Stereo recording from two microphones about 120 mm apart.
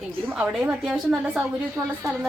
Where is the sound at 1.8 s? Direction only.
25° right (ahead or behind).